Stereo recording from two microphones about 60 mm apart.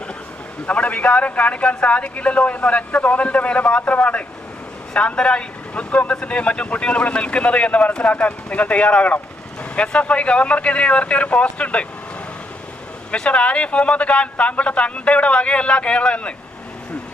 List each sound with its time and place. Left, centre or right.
0.7 s a man's voice: left
13.1 s a man's voice: centre